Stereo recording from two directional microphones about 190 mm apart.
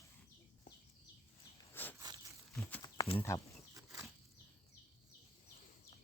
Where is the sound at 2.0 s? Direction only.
20° right (ahead or behind).